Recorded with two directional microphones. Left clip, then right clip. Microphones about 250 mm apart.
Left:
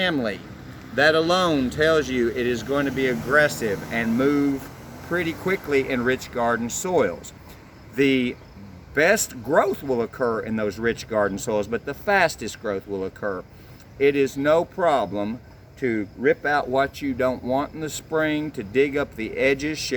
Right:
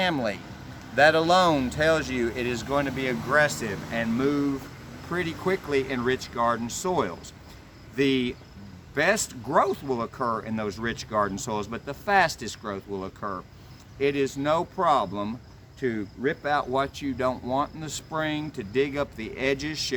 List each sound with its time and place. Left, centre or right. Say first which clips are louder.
0.0 s speech: left 2 dB; right